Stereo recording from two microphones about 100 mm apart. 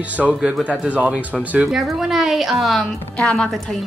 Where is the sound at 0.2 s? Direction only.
10° right (ahead or behind).